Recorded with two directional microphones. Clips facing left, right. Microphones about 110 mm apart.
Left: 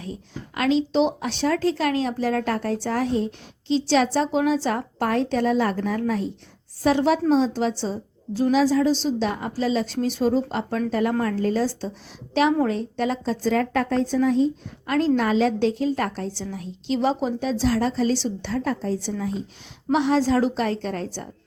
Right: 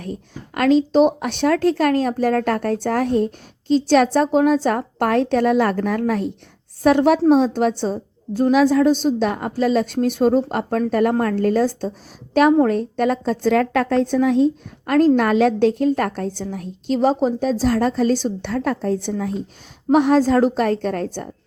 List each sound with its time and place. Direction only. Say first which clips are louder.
0.0 s a woman's voice: right 4 dB; 50° right (ahead or behind)